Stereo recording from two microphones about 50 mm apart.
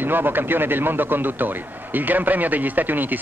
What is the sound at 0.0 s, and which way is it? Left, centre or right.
Speech, right.